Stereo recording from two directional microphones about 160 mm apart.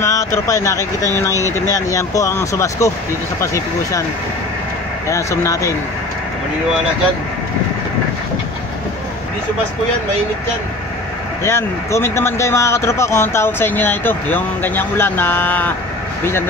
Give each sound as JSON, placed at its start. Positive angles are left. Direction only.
{"t": 0.0, "sound": "speech", "side_deg": 20}
{"t": 5.0, "sound": "speech", "side_deg": 20}
{"t": 11.4, "sound": "speech", "side_deg": 15}